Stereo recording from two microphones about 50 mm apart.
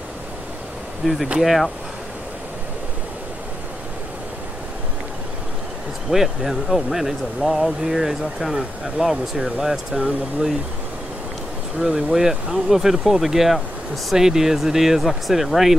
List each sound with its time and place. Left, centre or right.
1.0 s speech: centre
6.0 s speech: centre
11.8 s speech: centre